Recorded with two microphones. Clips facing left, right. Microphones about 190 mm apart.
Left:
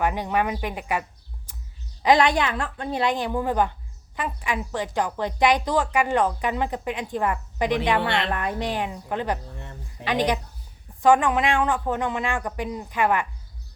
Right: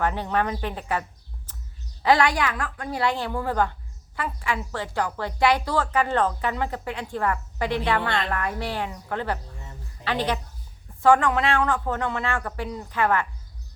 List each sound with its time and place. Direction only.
0.0 s a woman's voice: 15° left (ahead or behind)
1.5 s a sound: 10° left (ahead or behind)
2.0 s a woman's voice: 20° left (ahead or behind)